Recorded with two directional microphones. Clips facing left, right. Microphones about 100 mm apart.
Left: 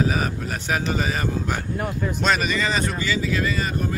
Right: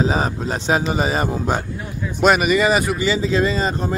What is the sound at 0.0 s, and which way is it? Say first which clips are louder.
Speech: right 4 dB; 25° right (ahead or behind).